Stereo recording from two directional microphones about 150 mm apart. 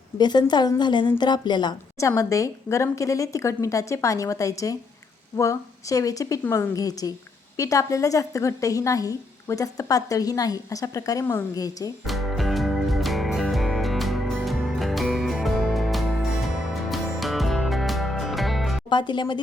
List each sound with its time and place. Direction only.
0.2 s a woman's voice: 30° left (ahead or behind)
12.0 s music: centre (ahead or behind)
18.9 s speech: 30° left (ahead or behind)